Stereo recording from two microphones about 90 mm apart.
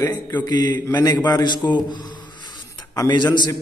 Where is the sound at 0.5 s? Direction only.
50° left (ahead or behind).